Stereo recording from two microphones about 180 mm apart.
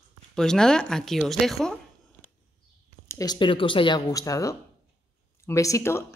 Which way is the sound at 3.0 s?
20° left (ahead or behind).